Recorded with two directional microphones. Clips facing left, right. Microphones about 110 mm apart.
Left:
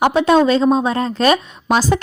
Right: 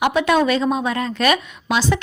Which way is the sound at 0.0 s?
30° left (ahead or behind).